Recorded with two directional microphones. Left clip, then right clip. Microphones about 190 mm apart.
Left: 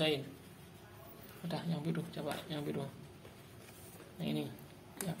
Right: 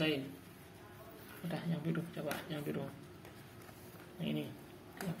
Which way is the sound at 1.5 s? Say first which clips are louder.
Left 1 dB; 25° left (ahead or behind).